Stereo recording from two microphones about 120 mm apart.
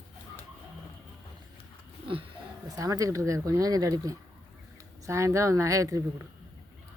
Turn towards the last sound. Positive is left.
turn(degrees=-25)  # may be behind; listen again after turning